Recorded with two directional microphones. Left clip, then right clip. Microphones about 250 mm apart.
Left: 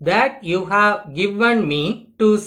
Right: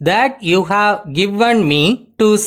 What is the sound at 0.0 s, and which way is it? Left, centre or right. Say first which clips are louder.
Speech: right 3 dB; right.